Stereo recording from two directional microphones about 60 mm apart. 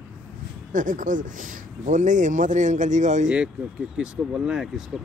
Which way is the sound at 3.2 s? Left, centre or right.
Centre.